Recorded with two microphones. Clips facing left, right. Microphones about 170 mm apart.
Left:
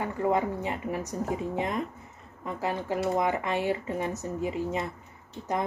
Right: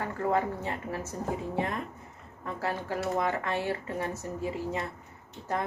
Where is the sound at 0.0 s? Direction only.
15° left (ahead or behind).